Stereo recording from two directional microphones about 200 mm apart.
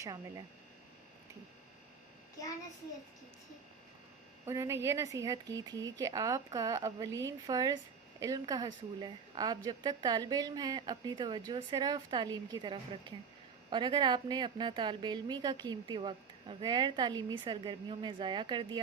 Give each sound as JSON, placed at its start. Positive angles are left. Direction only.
{"t": 0.0, "sound": "a woman's voice", "side_deg": -20}
{"t": 4.4, "sound": "a woman's voice", "side_deg": -15}